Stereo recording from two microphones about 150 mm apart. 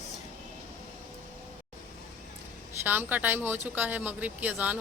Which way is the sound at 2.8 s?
10° right (ahead or behind).